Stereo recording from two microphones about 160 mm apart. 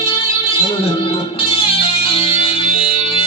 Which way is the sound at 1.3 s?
35° left (ahead or behind).